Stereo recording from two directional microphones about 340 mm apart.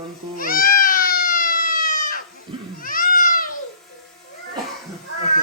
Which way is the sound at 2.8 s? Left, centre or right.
Left.